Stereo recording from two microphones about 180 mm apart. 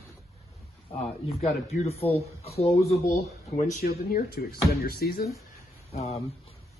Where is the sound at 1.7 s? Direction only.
35° left (ahead or behind).